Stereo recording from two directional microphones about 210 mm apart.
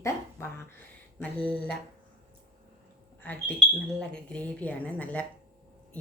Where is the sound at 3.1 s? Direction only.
10° left (ahead or behind).